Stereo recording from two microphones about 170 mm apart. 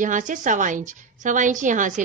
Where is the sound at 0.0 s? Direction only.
50° right (ahead or behind).